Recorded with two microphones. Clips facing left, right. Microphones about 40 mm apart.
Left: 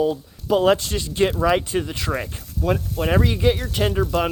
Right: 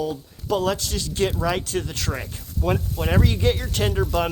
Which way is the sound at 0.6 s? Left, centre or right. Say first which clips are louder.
Left 6 dB; left.